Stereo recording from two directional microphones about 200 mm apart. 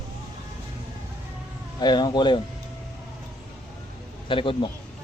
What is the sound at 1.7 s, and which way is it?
Speech, 20° left (ahead or behind).